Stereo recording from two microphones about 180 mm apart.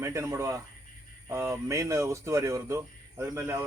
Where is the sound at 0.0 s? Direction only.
15° right (ahead or behind).